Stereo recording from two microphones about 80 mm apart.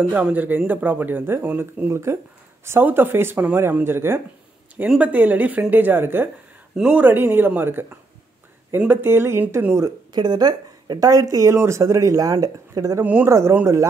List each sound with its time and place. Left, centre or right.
0.1 s speech: centre
1.9 s speech: right
4.8 s speech: centre
6.7 s speech: centre
7.0 s speech: right
10.1 s speech: right
13.0 s speech: centre
13.3 s speech: right